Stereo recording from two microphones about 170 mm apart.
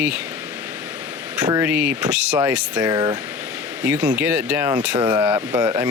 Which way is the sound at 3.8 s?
5° right (ahead or behind).